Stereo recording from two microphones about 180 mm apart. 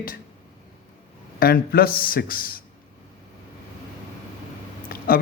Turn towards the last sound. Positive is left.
turn(degrees=55)  # may be behind; listen again after turning